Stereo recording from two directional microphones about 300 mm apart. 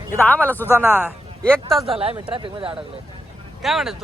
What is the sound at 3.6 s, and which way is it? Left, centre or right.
Speech, centre.